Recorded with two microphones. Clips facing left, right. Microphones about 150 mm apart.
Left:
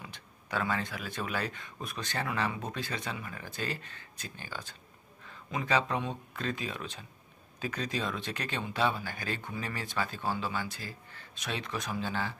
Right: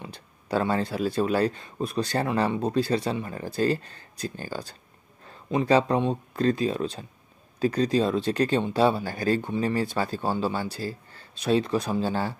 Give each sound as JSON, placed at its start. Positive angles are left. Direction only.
{"t": 0.0, "sound": "speech", "side_deg": -35}